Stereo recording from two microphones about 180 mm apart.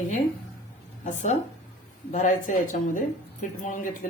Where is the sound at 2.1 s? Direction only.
45° left (ahead or behind).